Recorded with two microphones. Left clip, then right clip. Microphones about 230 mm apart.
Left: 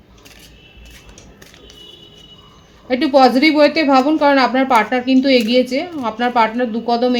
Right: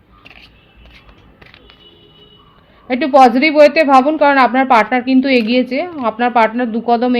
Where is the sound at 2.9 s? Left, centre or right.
Right.